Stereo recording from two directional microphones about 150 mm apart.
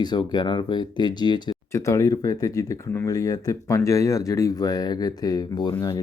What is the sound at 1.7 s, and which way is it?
Speech, 20° left (ahead or behind).